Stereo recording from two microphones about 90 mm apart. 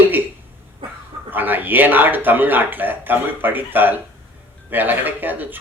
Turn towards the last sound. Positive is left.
turn(degrees=-20)  # may be behind; listen again after turning